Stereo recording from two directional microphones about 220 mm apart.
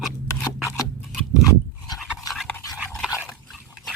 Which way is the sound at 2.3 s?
5° left (ahead or behind).